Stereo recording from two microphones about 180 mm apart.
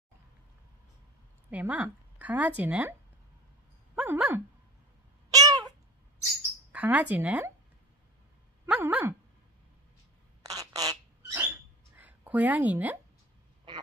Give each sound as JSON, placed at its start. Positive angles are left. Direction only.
{"t": 1.5, "sound": "speech", "side_deg": -5}
{"t": 3.9, "sound": "dog", "side_deg": -5}
{"t": 5.3, "sound": "cat", "side_deg": -20}
{"t": 6.7, "sound": "speech", "side_deg": -10}
{"t": 8.6, "sound": "dog", "side_deg": -5}
{"t": 10.4, "sound": "a sound", "side_deg": -20}
{"t": 13.7, "sound": "quack", "side_deg": -25}